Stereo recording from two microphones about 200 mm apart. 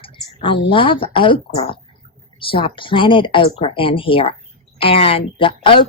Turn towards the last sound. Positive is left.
turn(degrees=25)  # may be behind; listen again after turning